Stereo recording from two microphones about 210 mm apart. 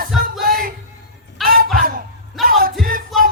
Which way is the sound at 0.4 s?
45° right (ahead or behind).